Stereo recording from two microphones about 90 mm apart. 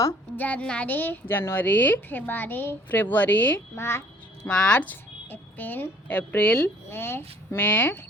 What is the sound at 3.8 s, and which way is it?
Speech, 30° left (ahead or behind).